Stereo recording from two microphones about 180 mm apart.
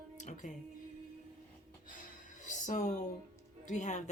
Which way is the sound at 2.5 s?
45° left (ahead or behind).